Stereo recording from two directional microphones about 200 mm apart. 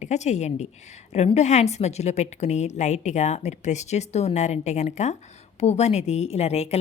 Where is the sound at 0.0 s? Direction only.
35° left (ahead or behind).